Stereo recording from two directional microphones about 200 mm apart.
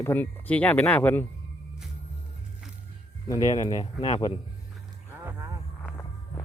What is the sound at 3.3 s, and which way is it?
Speech, 20° left (ahead or behind).